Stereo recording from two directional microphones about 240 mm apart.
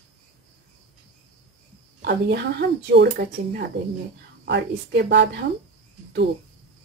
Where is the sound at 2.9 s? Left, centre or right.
Right.